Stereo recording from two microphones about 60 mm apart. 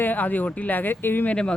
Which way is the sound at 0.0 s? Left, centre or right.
Left.